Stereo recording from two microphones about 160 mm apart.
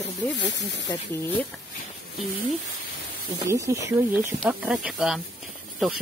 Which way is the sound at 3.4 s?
20° right (ahead or behind).